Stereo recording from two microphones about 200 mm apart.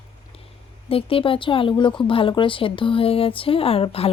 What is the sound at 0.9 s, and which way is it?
Speech, 30° left (ahead or behind).